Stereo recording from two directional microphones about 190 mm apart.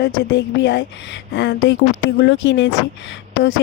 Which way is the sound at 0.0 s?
65° left (ahead or behind).